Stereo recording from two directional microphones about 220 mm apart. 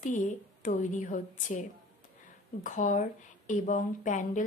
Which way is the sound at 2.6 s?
35° left (ahead or behind).